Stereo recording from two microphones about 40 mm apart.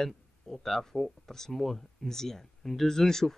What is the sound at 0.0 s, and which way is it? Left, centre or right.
Speech, centre.